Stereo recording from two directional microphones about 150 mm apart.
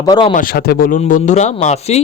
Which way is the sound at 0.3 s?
80° left.